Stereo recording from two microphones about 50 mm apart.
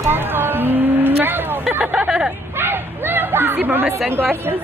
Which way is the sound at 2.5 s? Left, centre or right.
Right.